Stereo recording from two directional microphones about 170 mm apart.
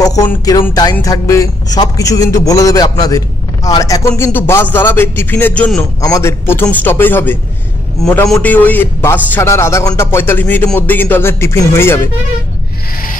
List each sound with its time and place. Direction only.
0.0 s a man's voice: 20° left (ahead or behind)